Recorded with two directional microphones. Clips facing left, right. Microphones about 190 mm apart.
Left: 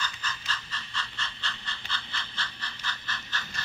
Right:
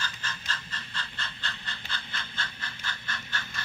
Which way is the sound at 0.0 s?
50° right (ahead or behind).